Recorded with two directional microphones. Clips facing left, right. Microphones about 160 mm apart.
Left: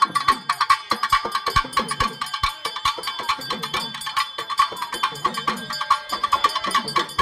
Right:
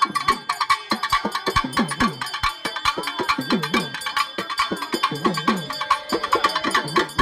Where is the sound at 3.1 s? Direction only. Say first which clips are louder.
Right 7 dB; 70° right (ahead or behind).